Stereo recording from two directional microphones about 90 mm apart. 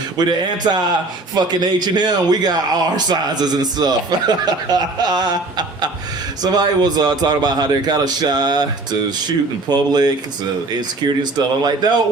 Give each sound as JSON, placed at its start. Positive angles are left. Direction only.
{"t": 0.2, "sound": "a man's voice", "side_deg": -50}
{"t": 9.6, "sound": "a man's voice", "side_deg": -50}